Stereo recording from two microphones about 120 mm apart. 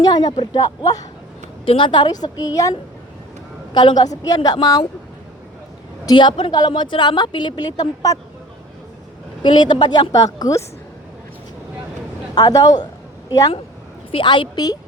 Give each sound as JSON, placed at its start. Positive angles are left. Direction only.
{"t": 0.0, "sound": "a woman's voice", "side_deg": 35}
{"t": 1.6, "sound": "a woman's voice", "side_deg": 45}
{"t": 3.8, "sound": "a woman's voice", "side_deg": 35}
{"t": 6.1, "sound": "a woman's voice", "side_deg": 40}
{"t": 9.4, "sound": "a woman's voice", "side_deg": 40}
{"t": 12.3, "sound": "a woman's voice", "side_deg": 35}
{"t": 12.8, "sound": "a sound", "side_deg": 35}
{"t": 14.1, "sound": "a woman's voice", "side_deg": 40}